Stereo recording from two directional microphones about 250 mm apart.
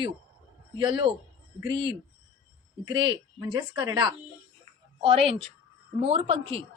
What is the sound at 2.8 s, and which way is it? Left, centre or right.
A woman's voice, centre.